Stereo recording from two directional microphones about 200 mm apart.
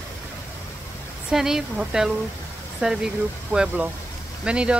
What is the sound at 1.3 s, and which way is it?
Speech, centre (ahead or behind).